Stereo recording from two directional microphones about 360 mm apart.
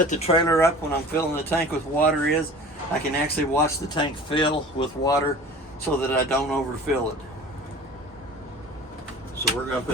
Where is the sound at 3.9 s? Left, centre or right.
Centre.